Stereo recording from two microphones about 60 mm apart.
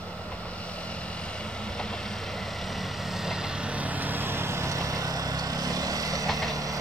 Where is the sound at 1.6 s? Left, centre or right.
Centre.